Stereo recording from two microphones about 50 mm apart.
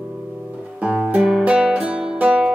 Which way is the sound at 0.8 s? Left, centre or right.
Right.